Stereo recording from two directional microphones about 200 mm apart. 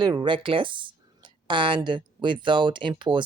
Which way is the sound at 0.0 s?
20° right (ahead or behind).